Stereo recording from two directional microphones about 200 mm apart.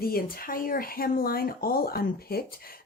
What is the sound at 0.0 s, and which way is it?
A woman's voice, 45° left (ahead or behind).